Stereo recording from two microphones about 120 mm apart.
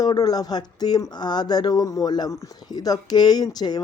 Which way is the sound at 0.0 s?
30° left (ahead or behind).